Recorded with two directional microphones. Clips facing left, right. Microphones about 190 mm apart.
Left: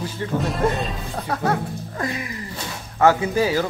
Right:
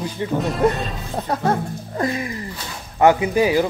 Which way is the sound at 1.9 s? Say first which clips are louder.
Right 6 dB; 30° right (ahead or behind).